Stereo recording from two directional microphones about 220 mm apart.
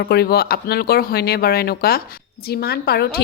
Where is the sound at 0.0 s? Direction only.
45° left (ahead or behind).